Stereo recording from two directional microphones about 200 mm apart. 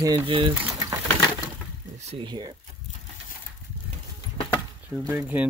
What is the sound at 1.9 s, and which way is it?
Speech, 30° right (ahead or behind).